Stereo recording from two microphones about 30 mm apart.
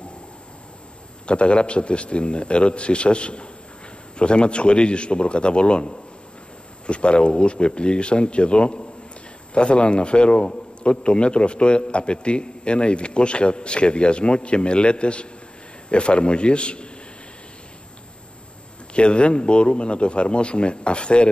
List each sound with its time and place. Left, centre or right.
1.2 s a man's voice: left
18.9 s a man's voice: left